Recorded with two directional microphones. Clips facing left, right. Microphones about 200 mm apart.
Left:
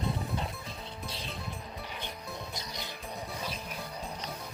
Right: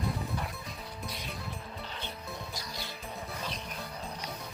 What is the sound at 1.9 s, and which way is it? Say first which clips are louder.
Music: even; 15° left (ahead or behind).